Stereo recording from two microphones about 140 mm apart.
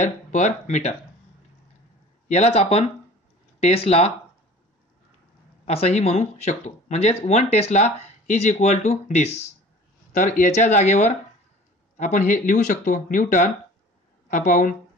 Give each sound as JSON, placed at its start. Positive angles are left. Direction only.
{"t": 0.0, "sound": "speech", "side_deg": 60}
{"t": 2.2, "sound": "speech", "side_deg": 50}
{"t": 5.7, "sound": "speech", "side_deg": 50}
{"t": 10.1, "sound": "a woman's voice", "side_deg": 65}